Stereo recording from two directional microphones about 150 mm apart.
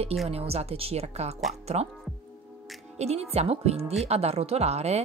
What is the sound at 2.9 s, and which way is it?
Speech, 45° right (ahead or behind).